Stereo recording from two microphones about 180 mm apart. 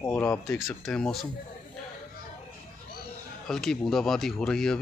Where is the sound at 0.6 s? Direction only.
Centre (ahead or behind).